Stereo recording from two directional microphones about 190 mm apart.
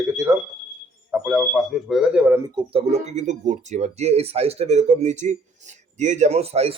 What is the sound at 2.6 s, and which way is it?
Speech, 30° right (ahead or behind).